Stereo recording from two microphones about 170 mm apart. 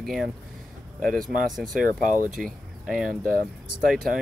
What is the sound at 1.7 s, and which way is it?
Speech, 55° right (ahead or behind).